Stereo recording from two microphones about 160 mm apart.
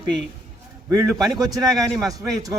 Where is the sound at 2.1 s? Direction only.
20° right (ahead or behind).